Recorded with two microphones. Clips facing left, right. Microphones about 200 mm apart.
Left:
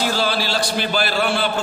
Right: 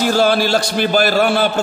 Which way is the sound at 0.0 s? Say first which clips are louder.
Right 7 dB; 50° right (ahead or behind).